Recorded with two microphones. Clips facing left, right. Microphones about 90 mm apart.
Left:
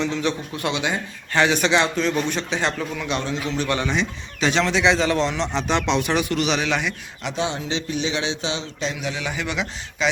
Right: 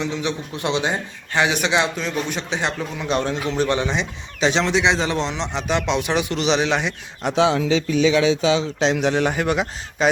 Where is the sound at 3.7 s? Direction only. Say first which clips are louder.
Right 1 dB; 20° right (ahead or behind).